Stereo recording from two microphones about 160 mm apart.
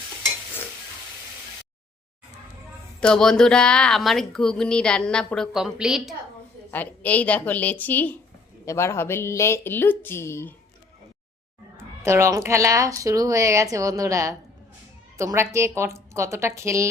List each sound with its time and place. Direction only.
3.0 s speech: 5° left (ahead or behind)
6.7 s speech: 10° left (ahead or behind)
11.8 s a woman's voice: 15° right (ahead or behind)